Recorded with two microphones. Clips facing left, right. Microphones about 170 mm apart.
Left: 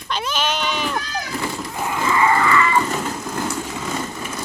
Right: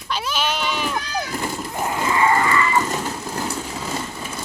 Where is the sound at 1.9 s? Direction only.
35° right (ahead or behind).